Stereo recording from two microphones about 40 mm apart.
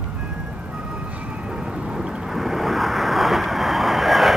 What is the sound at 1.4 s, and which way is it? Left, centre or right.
Vehicle, right.